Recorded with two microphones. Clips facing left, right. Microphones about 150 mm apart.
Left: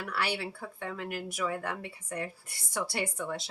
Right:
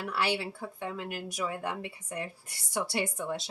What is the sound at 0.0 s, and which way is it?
A woman's voice, 20° right (ahead or behind).